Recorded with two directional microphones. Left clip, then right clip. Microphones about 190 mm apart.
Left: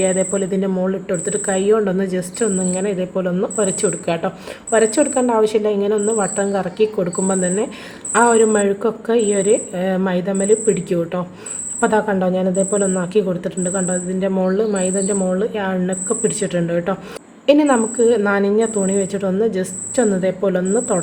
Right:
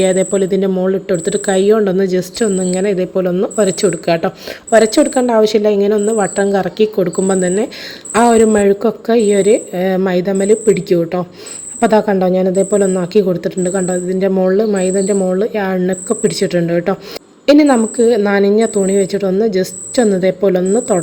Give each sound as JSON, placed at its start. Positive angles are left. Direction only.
{"t": 0.0, "sound": "speech", "side_deg": -40}
{"t": 20.0, "sound": "speech", "side_deg": -40}